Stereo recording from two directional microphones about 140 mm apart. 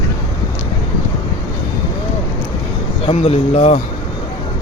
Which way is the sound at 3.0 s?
45° left (ahead or behind).